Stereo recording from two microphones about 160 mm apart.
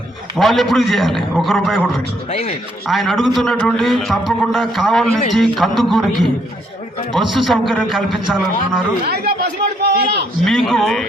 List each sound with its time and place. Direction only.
0.3 s a man's voice: centre (ahead or behind)
2.3 s a man's voice: 40° left (ahead or behind)
2.8 s a man's voice: centre (ahead or behind)
9.0 s a sound: 80° right
10.4 s a man's voice: centre (ahead or behind)